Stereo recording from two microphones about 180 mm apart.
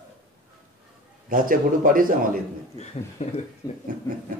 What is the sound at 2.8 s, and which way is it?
Speech, 40° left (ahead or behind).